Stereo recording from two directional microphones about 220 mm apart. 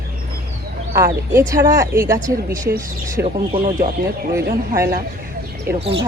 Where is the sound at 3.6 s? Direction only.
40° right (ahead or behind).